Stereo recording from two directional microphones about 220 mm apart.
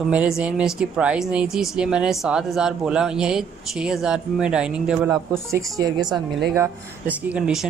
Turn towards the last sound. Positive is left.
turn(degrees=-5)  # may be behind; listen again after turning